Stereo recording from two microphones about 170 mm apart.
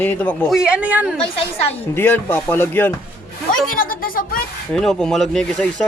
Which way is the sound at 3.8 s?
55° left (ahead or behind).